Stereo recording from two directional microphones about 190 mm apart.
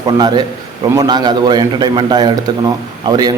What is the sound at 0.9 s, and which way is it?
A man's voice, 20° right (ahead or behind).